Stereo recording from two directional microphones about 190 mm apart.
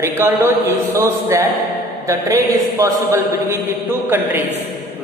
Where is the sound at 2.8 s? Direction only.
15° right (ahead or behind).